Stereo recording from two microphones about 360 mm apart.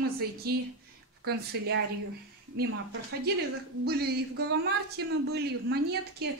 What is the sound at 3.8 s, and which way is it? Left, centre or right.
A woman's voice, right.